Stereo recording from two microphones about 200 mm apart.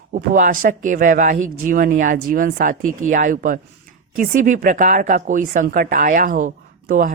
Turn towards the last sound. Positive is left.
turn(degrees=-40)  # may be behind; listen again after turning